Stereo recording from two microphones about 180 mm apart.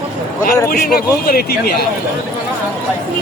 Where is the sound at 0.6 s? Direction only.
60° left (ahead or behind).